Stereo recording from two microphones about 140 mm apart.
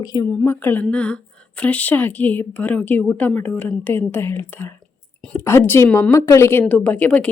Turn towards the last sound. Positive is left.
turn(degrees=10)  # may be behind; listen again after turning